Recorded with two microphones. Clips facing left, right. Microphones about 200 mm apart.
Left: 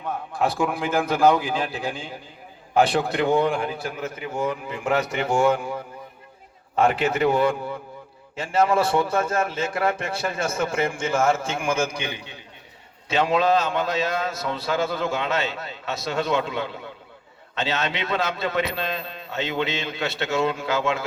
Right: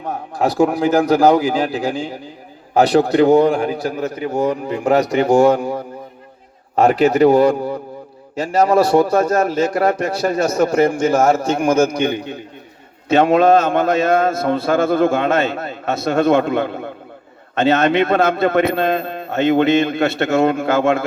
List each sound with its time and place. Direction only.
0.0 s a man's voice: 40° right (ahead or behind)